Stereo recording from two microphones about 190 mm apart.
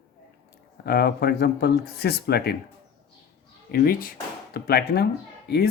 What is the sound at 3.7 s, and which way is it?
Speech, 50° left (ahead or behind).